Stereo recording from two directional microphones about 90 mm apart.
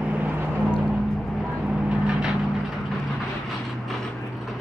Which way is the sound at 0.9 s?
Centre (ahead or behind).